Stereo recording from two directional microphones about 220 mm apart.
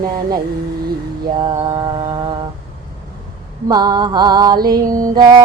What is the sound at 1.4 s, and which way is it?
Mantra, 20° right (ahead or behind).